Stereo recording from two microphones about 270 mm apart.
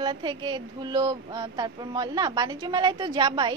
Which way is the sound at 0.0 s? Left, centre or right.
Centre.